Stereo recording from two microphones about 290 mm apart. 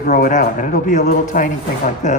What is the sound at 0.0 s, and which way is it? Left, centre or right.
A man's voice, left.